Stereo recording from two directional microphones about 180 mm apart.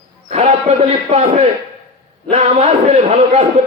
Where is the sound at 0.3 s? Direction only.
35° right (ahead or behind).